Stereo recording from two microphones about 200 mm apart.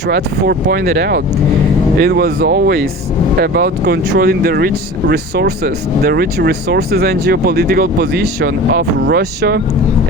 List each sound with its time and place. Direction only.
0.1 s speech: 50° right (ahead or behind)